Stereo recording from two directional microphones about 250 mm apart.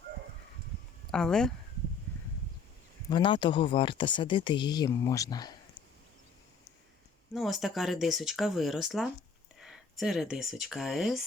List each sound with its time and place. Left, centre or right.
1.1 s speech: centre
3.1 s speech: centre
7.3 s speech: centre